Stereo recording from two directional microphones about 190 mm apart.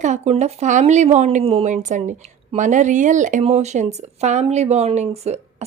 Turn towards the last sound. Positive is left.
turn(degrees=-35)  # may be behind; listen again after turning